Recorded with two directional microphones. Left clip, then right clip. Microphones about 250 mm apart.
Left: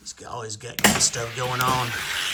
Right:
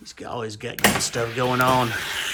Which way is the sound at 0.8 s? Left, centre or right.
Centre.